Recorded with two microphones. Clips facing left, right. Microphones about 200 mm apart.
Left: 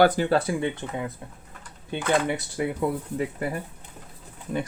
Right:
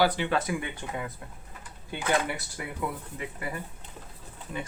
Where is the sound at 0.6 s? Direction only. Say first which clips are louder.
Left 6 dB; 20° left (ahead or behind).